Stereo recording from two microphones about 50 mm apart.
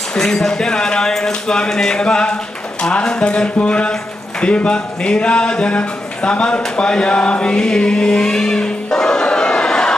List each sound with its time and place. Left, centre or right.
0.1 s speech: centre
6.8 s chant: centre